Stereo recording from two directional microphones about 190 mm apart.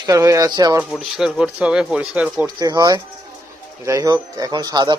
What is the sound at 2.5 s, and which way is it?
Speech, 20° right (ahead or behind).